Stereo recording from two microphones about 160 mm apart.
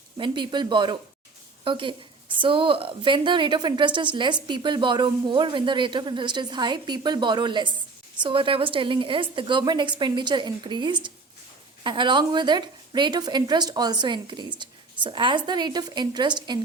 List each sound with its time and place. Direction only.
0.2 s a woman's voice: 30° right (ahead or behind)